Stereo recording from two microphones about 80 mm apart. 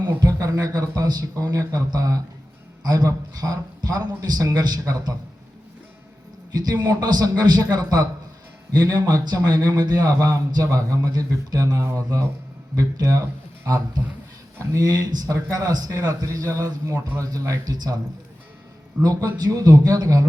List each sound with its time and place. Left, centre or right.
0.2 s a man's voice: right
6.5 s a man's voice: right
14.6 s a man's voice: right
19.0 s a man's voice: right